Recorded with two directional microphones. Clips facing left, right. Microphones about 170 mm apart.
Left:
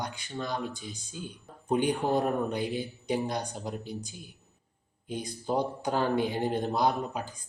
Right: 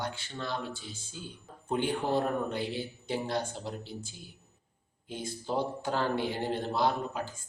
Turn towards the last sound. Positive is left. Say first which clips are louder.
# left 2 dB
turn(degrees=15)  # may be behind; listen again after turning